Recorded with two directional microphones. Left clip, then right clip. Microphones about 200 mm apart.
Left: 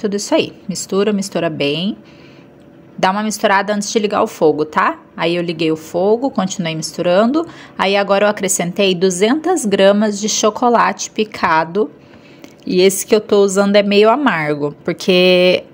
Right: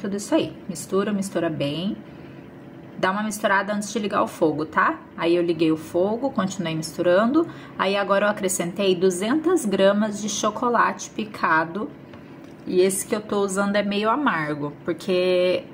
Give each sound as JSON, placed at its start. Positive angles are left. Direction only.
{"t": 0.0, "sound": "a woman's voice", "side_deg": 45}
{"t": 3.0, "sound": "a woman's voice", "side_deg": 45}